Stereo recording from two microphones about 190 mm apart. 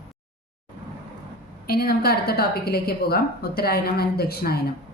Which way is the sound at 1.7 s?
55° left (ahead or behind).